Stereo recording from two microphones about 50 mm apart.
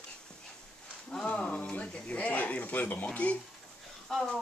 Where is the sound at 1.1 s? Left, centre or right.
Left.